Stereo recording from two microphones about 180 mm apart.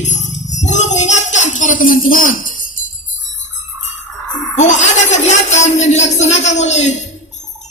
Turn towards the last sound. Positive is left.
turn(degrees=40)  # may be behind; listen again after turning